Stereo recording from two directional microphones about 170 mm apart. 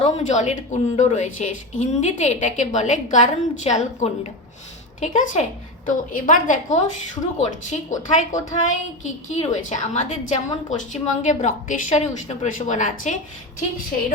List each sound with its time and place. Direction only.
0.0 s a woman's voice: 45° left (ahead or behind)